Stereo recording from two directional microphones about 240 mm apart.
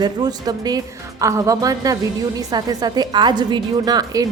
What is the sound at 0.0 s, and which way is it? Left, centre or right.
A woman's voice, centre.